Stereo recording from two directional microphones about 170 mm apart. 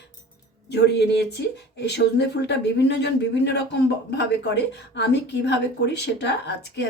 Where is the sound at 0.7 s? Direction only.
80° left.